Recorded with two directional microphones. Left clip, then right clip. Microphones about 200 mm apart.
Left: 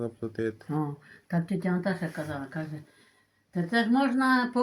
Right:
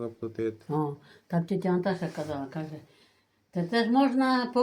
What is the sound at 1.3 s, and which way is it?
Speech, centre (ahead or behind).